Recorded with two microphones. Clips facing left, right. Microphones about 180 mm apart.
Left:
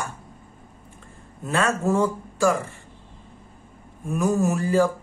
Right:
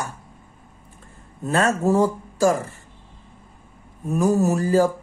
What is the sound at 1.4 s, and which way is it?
Speech, 40° right (ahead or behind).